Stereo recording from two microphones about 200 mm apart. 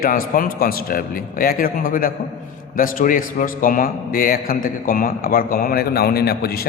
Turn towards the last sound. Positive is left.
turn(degrees=50)  # may be behind; listen again after turning